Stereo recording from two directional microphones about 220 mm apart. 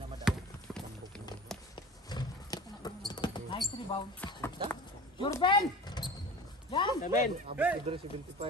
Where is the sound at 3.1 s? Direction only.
20° left (ahead or behind).